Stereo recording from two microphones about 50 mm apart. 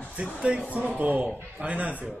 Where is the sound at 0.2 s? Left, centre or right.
Right.